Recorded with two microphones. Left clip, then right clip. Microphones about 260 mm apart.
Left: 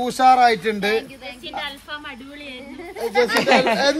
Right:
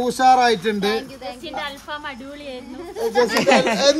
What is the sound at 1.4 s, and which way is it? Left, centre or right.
Speech, right.